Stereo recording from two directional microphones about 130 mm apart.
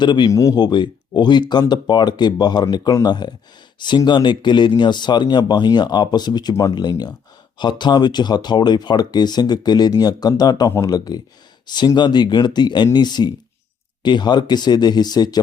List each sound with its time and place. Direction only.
0.0 s speech: 35° left (ahead or behind)